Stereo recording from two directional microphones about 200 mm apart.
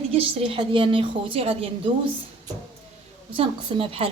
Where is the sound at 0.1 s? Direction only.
25° right (ahead or behind).